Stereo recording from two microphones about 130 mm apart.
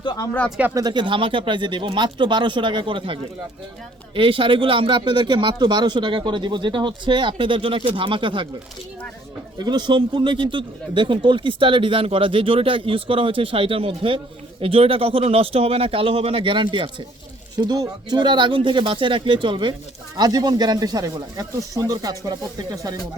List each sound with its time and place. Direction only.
0.7 s speech: 30° right (ahead or behind)
9.6 s speech: 35° right (ahead or behind)